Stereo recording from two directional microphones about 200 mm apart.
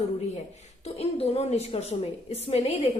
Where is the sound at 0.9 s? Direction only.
30° left (ahead or behind).